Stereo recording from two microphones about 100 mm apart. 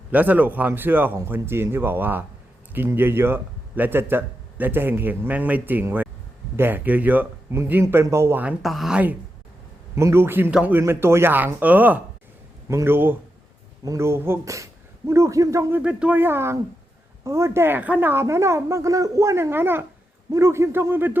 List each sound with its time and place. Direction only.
0.1 s speech: 15° right (ahead or behind)
8.6 s speech: centre (ahead or behind)
9.9 s speech: 25° right (ahead or behind)
12.6 s speech: 25° right (ahead or behind)
15.7 s speech: 15° right (ahead or behind)